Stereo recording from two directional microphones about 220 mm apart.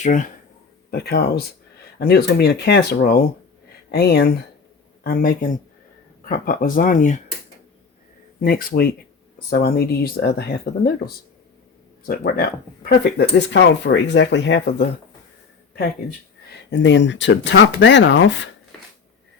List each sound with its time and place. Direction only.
0.0 s speech: 35° left (ahead or behind)
8.4 s speech: 40° left (ahead or behind)
12.0 s speech: 40° left (ahead or behind)
16.6 s speech: 55° left (ahead or behind)